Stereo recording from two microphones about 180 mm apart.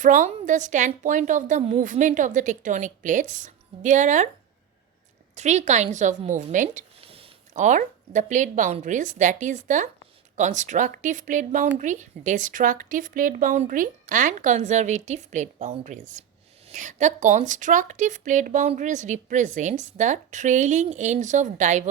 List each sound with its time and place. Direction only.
0.0 s a woman's voice: 45° right (ahead or behind)
5.3 s a woman's voice: 40° right (ahead or behind)